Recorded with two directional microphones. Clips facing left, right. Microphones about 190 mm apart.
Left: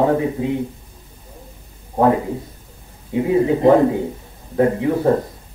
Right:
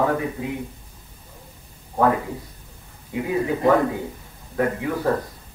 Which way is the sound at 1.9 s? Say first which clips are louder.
Left 4 dB; 25° left (ahead or behind).